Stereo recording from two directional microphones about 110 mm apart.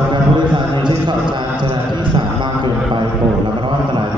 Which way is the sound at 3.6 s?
45° right (ahead or behind).